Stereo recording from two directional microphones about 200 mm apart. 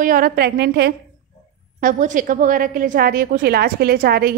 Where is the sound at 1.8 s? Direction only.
40° right (ahead or behind).